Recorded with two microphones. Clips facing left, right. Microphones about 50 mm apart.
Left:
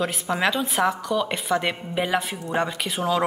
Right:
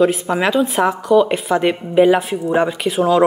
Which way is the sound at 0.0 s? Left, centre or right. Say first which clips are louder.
Right 8 dB; centre.